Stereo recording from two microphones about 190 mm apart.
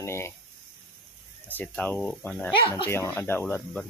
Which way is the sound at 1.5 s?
10° left (ahead or behind).